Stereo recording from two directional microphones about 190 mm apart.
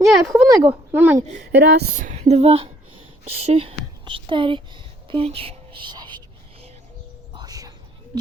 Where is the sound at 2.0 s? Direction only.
40° right (ahead or behind); by 6.2 s 25° right (ahead or behind).